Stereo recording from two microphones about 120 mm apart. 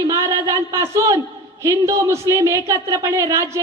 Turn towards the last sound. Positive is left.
turn(degrees=-25)  # may be behind; listen again after turning